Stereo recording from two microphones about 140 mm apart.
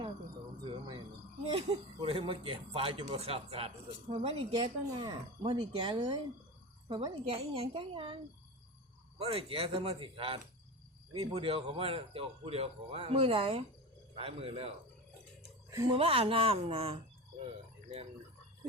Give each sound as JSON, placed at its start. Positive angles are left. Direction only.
{"t": 0.6, "sound": "cricket", "side_deg": -35}
{"t": 1.5, "sound": "speech", "side_deg": -40}
{"t": 16.0, "sound": "speech", "side_deg": -40}